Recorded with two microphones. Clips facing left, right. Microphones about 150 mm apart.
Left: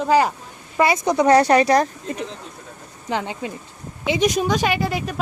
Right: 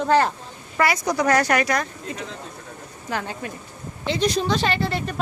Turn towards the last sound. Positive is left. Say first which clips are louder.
# left 2 dB
turn(degrees=10)  # may be behind; listen again after turning